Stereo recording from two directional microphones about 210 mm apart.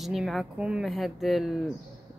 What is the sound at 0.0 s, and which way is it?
Speech, centre (ahead or behind).